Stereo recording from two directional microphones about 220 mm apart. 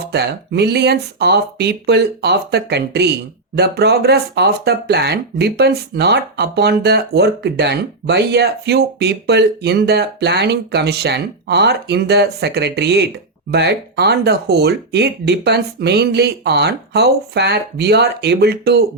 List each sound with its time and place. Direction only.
0.0 s speech: 50° right (ahead or behind)